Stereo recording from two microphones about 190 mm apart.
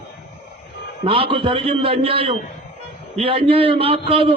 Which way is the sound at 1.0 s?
30° right (ahead or behind).